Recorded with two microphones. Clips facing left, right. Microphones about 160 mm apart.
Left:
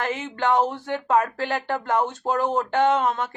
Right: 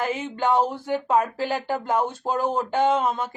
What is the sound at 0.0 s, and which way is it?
A woman's voice, 10° right (ahead or behind).